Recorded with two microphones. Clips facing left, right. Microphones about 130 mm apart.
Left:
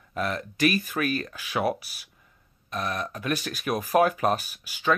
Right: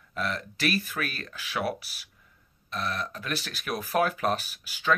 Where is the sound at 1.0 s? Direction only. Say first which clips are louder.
Left 6 dB; 25° left (ahead or behind).